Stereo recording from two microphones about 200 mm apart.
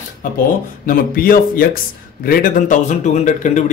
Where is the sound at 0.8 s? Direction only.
45° left (ahead or behind).